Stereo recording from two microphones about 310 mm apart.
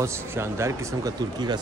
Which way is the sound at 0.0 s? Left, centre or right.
Centre.